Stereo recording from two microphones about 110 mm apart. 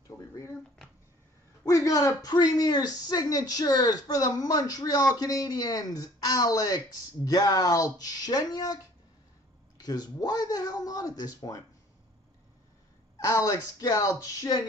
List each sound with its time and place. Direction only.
1.7 s speech: 30° left (ahead or behind)
9.8 s speech: 40° left (ahead or behind)
13.2 s speech: 30° left (ahead or behind)